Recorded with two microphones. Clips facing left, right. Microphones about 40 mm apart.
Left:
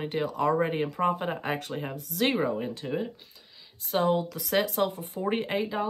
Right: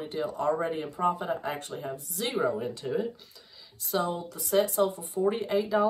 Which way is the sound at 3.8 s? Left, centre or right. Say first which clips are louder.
Left 4 dB; left.